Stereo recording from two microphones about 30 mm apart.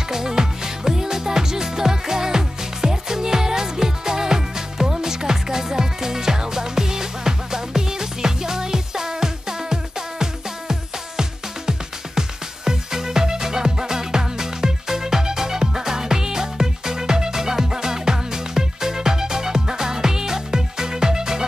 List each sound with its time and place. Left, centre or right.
0.1 s music: centre